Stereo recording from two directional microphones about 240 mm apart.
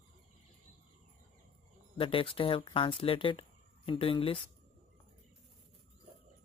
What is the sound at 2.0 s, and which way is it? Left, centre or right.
Speech, left.